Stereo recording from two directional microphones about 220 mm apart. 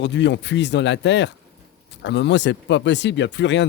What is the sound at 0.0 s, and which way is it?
Speech, 55° left (ahead or behind).